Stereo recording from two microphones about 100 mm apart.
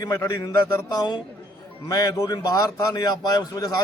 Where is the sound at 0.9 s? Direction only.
40° left (ahead or behind).